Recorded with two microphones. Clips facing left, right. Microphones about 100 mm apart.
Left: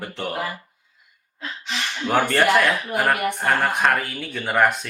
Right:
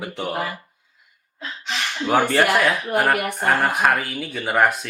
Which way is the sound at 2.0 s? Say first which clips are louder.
Right 1 dB; 5° right (ahead or behind).